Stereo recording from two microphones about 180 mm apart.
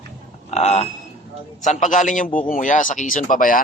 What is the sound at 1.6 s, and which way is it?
Speech, 45° left (ahead or behind).